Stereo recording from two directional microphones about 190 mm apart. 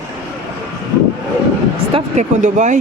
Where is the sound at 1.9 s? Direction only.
40° right (ahead or behind).